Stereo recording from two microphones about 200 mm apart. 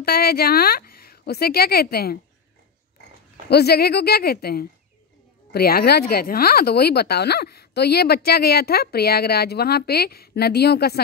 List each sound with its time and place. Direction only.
0.0 s speech: 50° left (ahead or behind)
3.4 s speech: 55° left (ahead or behind)